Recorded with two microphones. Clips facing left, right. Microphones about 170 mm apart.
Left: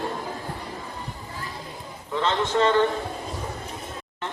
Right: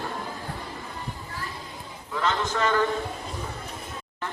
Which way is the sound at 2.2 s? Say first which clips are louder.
Left 4 dB; 30° left (ahead or behind).